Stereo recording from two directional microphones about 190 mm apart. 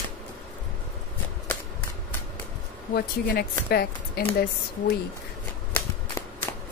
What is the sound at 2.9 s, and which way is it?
A woman's voice, 55° left (ahead or behind).